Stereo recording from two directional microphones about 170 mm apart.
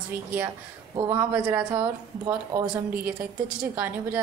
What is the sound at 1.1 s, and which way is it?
A woman's voice, 15° right (ahead or behind).